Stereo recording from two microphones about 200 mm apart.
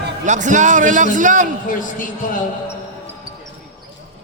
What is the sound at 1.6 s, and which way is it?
Speech, 40° left (ahead or behind).